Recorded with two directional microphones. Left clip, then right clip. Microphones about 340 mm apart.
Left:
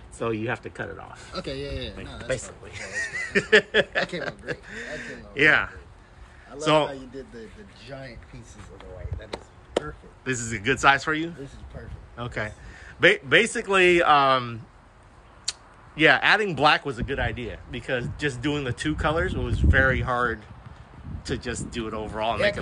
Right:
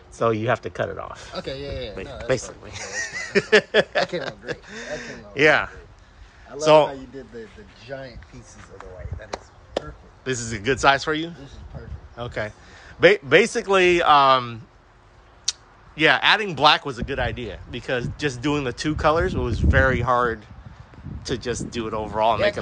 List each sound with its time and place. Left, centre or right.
0.2 s speech: right
6.9 s speech: right
9.8 s speech: centre